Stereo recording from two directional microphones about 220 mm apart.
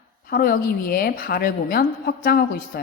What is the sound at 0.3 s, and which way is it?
Speech, 40° left (ahead or behind).